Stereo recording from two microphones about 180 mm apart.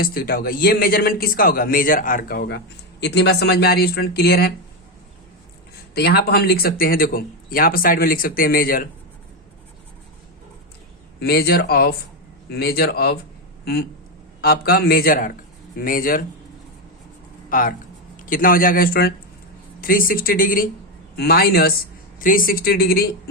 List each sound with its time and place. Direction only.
0.0 s speech: 55° left (ahead or behind)
5.9 s speech: 60° left (ahead or behind)
11.2 s speech: 60° left (ahead or behind)
14.4 s speech: 60° left (ahead or behind)
17.5 s speech: 50° left (ahead or behind)